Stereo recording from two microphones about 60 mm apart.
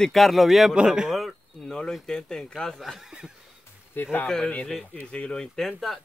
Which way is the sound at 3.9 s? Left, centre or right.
Left.